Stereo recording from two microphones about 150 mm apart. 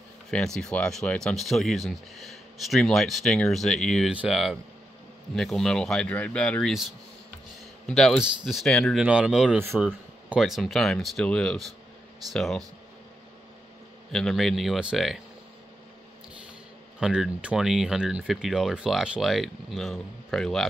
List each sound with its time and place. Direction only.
0.6 s speech: 5° left (ahead or behind)
7.9 s speech: 5° left (ahead or behind)
9.0 s speech: 5° right (ahead or behind)
9.6 s speech: 15° right (ahead or behind)
10.3 s speech: centre (ahead or behind)
14.1 s speech: centre (ahead or behind)
17.0 s speech: 5° right (ahead or behind)